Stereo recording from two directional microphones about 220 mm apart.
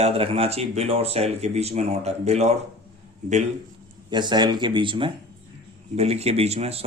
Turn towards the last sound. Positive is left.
turn(degrees=-30)  # may be behind; listen again after turning